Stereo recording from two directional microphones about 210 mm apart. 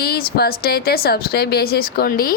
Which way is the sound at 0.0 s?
45° left (ahead or behind).